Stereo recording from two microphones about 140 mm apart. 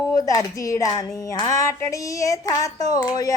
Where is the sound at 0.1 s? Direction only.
25° left (ahead or behind).